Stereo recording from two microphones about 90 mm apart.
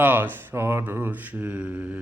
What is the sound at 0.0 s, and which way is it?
Mantra, 20° right (ahead or behind).